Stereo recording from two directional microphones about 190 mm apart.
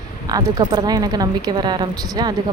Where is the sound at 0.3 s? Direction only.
20° right (ahead or behind).